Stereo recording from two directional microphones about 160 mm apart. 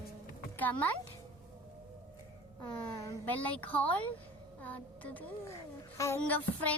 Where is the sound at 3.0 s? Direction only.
20° left (ahead or behind).